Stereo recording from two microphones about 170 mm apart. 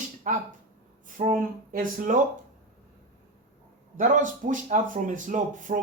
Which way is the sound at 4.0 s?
50° right (ahead or behind).